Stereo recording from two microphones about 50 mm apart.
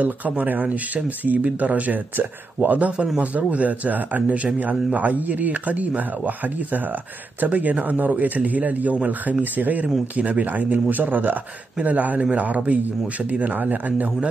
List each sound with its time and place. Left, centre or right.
0.0 s speech: right